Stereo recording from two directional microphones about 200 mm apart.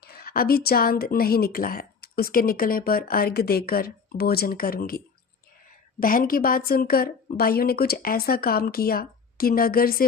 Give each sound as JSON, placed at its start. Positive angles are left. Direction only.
{"t": 0.0, "sound": "speech", "side_deg": 50}